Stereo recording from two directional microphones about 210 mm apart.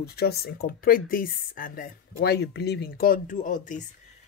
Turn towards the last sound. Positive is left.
turn(degrees=35)  # may be behind; listen again after turning